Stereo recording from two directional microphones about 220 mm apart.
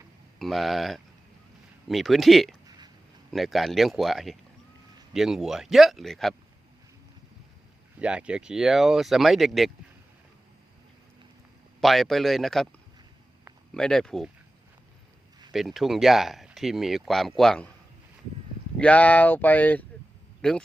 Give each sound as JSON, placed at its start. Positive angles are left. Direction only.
{"t": 0.3, "sound": "speech", "side_deg": 0}
{"t": 2.6, "sound": "a sound", "side_deg": -20}
{"t": 3.3, "sound": "speech", "side_deg": 0}
{"t": 7.9, "sound": "speech", "side_deg": -5}
{"t": 11.8, "sound": "speech", "side_deg": 0}
{"t": 13.7, "sound": "speech", "side_deg": 5}
{"t": 15.5, "sound": "speech", "side_deg": 0}
{"t": 18.8, "sound": "speech", "side_deg": 5}